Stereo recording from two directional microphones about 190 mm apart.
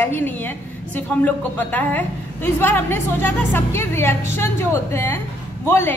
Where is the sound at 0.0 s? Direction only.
10° left (ahead or behind).